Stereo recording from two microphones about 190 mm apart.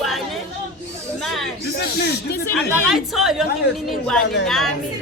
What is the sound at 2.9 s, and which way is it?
A woman's voice, centre (ahead or behind).